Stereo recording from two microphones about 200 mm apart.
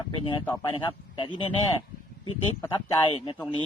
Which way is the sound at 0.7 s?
25° left (ahead or behind).